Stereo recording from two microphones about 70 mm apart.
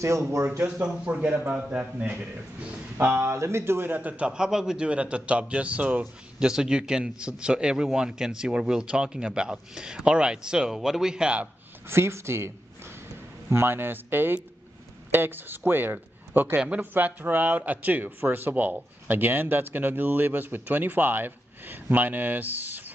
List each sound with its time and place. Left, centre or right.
0.0 s speech: right
0.6 s a man's voice: right
3.2 s speech: right
4.3 s a man's voice: centre
11.9 s a man's voice: right